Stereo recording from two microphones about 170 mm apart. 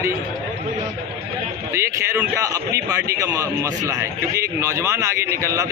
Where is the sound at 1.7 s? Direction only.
15° right (ahead or behind).